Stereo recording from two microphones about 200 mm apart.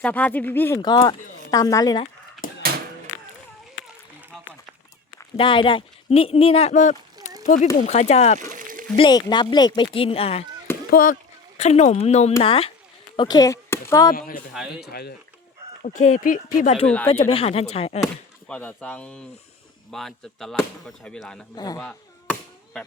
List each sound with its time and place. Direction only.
0.0 s speech: 5° left (ahead or behind)
5.4 s speech: 25° left (ahead or behind)
8.5 s a sound: 40° right (ahead or behind)
9.0 s speech: 20° left (ahead or behind)
10.9 s speech: 40° left (ahead or behind); by 14.1 s 15° left (ahead or behind)
14.1 s speech: 45° left (ahead or behind)
15.8 s speech: 40° left (ahead or behind)
16.8 s speech: 5° left (ahead or behind)
17.1 s speech: 30° left (ahead or behind)
18.0 s chop: 5° left (ahead or behind)
19.9 s speech: centre (ahead or behind)
21.5 s speech: 20° left (ahead or behind)
21.8 s chop: 5° left (ahead or behind)